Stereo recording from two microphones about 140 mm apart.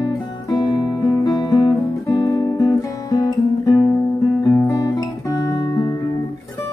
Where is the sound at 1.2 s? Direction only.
25° left (ahead or behind).